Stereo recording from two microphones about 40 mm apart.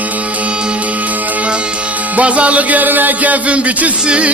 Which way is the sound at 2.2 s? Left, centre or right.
Right.